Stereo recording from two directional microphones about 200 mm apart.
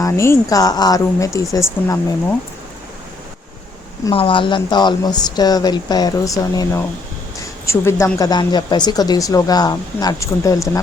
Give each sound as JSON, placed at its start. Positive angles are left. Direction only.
{"t": 0.0, "sound": "speech", "side_deg": 15}
{"t": 4.0, "sound": "speech", "side_deg": 25}